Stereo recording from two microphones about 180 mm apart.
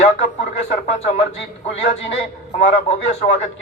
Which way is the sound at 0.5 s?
35° left (ahead or behind).